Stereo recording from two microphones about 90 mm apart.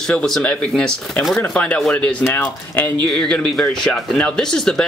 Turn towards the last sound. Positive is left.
turn(degrees=10)  # may be behind; listen again after turning